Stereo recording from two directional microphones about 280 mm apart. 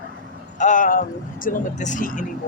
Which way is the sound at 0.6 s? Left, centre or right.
Left.